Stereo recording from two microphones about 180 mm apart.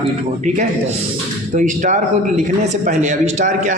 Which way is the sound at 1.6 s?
45° right (ahead or behind).